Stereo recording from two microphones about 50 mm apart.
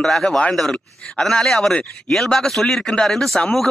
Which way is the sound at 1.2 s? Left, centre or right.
Centre.